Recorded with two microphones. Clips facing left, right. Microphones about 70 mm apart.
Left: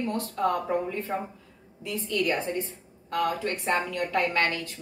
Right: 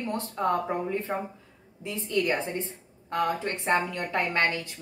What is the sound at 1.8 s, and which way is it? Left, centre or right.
A woman's voice, right.